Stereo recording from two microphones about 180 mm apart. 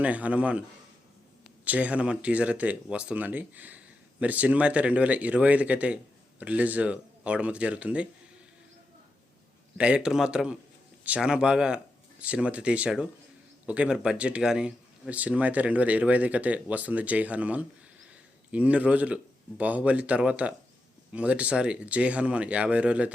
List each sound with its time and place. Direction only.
0.0 s speech: 10° right (ahead or behind)
1.6 s speech: 10° right (ahead or behind)
9.7 s a man's voice: 5° right (ahead or behind)